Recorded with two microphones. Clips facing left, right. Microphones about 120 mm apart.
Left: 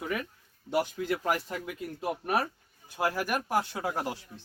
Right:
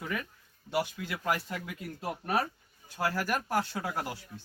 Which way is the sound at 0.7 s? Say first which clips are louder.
Left 4 dB; 40° left (ahead or behind).